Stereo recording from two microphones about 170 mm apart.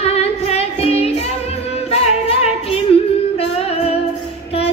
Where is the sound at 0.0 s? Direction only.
35° left (ahead or behind).